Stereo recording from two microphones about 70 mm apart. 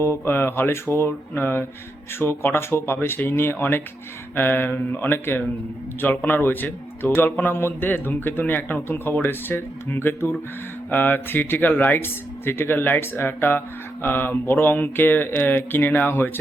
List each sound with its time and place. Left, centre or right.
0.0 s a man's voice: left